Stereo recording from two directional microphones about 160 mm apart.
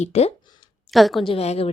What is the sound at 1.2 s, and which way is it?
Speech, 35° left (ahead or behind).